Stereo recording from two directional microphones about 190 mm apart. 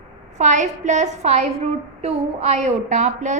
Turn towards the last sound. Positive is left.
turn(degrees=-40)  # may be behind; listen again after turning